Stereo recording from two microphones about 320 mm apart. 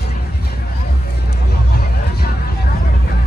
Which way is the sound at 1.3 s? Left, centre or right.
Left.